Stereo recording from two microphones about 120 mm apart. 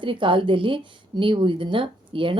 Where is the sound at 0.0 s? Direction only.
45° right (ahead or behind).